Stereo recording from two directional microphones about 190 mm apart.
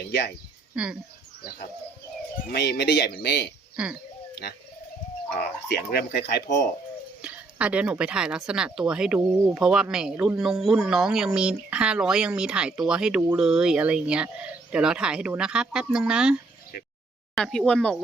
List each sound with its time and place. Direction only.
0.1 s speech: 60° left (ahead or behind)
0.7 s speech: 5° right (ahead or behind)
2.5 s speech: 60° left (ahead or behind)
3.8 s speech: 5° right (ahead or behind)
5.6 s speech: 55° left (ahead or behind)
7.2 s speech: 5° right (ahead or behind)